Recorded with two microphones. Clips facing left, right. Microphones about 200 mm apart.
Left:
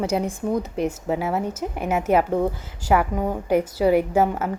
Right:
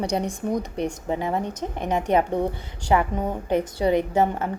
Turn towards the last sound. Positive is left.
turn(degrees=5)  # may be behind; listen again after turning